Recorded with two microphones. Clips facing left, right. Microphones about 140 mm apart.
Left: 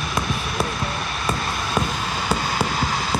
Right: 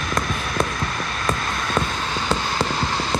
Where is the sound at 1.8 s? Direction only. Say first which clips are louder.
Even; 15° left (ahead or behind).